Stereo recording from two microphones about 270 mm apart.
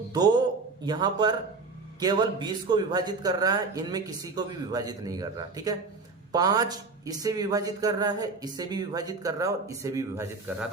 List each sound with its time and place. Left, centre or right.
0.8 s speech: centre